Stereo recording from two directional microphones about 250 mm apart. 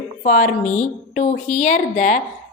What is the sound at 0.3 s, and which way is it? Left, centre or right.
A woman's voice, left.